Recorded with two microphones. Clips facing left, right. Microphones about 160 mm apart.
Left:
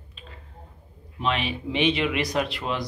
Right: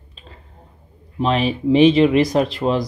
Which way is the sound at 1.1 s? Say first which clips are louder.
Right 8 dB; 35° right (ahead or behind).